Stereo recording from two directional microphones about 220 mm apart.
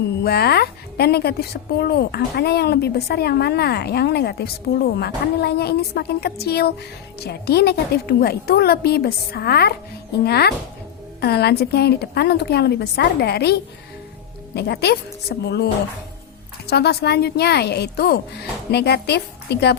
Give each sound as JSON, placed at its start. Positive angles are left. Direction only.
{"t": 0.3, "sound": "a woman's voice", "side_deg": 45}